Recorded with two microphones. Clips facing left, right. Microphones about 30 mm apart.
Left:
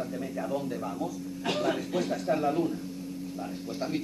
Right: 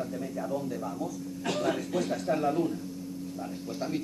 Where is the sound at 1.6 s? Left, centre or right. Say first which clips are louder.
Even; centre.